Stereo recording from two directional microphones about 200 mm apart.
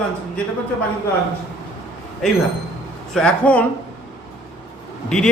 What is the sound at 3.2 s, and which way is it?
Speech, 5° left (ahead or behind).